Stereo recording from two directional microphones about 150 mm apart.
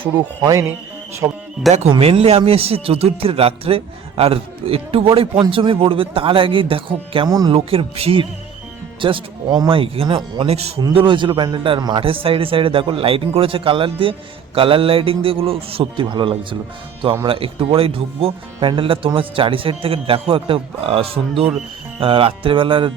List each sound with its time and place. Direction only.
1.2 s speech: 25° right (ahead or behind)
1.9 s a man's voice: 40° right (ahead or behind)
10.8 s a man's voice: 30° right (ahead or behind)